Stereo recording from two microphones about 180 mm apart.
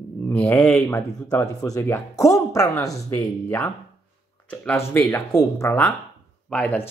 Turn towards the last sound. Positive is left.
turn(degrees=5)  # may be behind; listen again after turning